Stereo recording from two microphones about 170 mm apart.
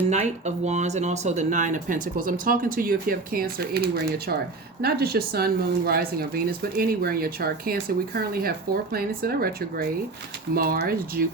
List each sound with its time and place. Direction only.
0.1 s speech: 40° right (ahead or behind); by 11.2 s 60° right (ahead or behind)